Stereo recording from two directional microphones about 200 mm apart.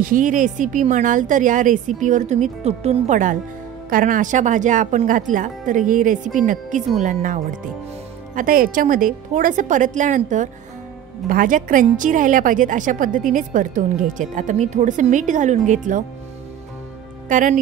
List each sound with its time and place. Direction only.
0.0 s a woman's voice: 40° right (ahead or behind)
8.4 s a woman's voice: 45° right (ahead or behind)
17.3 s speech: 40° right (ahead or behind)